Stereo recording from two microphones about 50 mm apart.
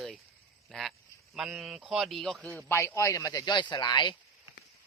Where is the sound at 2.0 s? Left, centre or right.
Centre.